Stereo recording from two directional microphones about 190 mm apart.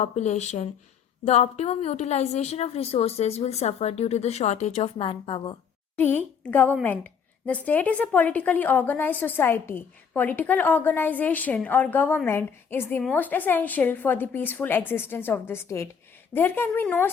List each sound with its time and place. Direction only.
0.0 s a woman's voice: 35° left (ahead or behind)
6.0 s a woman's voice: 10° left (ahead or behind)